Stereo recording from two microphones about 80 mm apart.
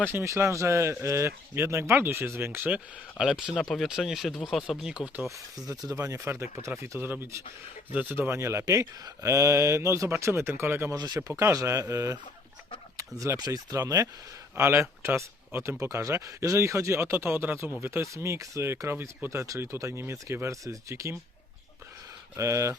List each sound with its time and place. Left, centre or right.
0.0 s speech: right
3.2 s speech: centre
5.5 s speech: right
6.2 s speech: right
10.9 s speech: right
11.3 s speech: right
14.5 s speech: right
22.4 s speech: right